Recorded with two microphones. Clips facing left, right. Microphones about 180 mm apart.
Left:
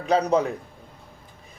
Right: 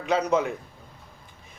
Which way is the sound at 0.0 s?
35° left (ahead or behind).